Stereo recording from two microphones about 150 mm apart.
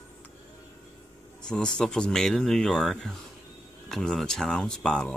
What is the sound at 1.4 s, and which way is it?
Speech, 5° left (ahead or behind).